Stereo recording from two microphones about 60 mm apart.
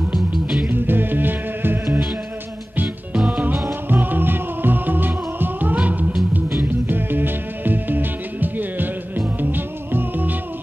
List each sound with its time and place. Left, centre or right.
0.1 s music: centre
0.7 s music: right